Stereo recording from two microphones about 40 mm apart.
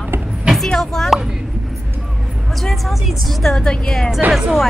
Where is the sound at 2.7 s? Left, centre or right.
Centre.